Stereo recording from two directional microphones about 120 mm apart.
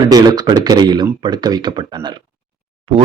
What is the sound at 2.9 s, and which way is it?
Speech, 55° right (ahead or behind).